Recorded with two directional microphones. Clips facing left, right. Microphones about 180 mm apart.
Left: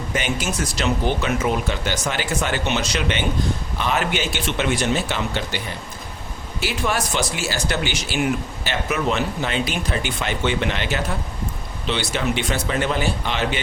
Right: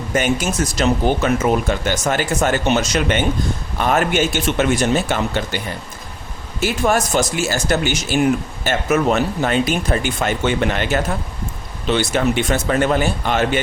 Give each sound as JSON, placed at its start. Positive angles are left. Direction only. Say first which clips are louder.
{"t": 0.1, "sound": "speech", "louder": "right 6 dB", "side_deg": -45}
{"t": 6.6, "sound": "speech", "louder": "right 6 dB", "side_deg": -45}